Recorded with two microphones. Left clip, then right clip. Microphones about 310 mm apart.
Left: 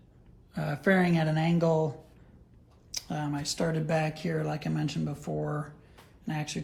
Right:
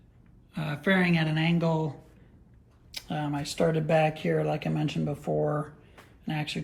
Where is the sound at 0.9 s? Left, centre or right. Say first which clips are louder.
Even; left.